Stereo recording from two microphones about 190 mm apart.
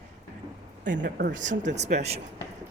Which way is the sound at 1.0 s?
60° right (ahead or behind).